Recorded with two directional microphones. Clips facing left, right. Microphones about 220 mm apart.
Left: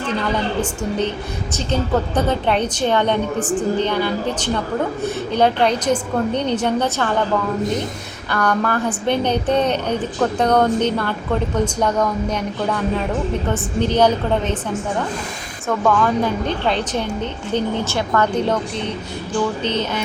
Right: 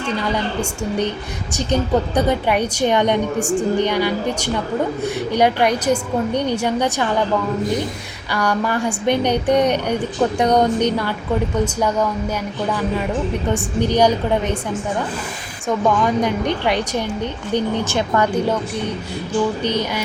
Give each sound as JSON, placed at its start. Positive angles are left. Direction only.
{"t": 0.6, "sound": "a woman's voice", "side_deg": -10}
{"t": 8.3, "sound": "a woman's voice", "side_deg": -10}
{"t": 15.8, "sound": "a woman's voice", "side_deg": -15}
{"t": 19.6, "sound": "a woman's voice", "side_deg": -10}